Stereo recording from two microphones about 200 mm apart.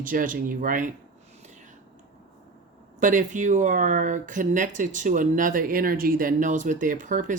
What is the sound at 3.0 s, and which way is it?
Speech, 40° right (ahead or behind).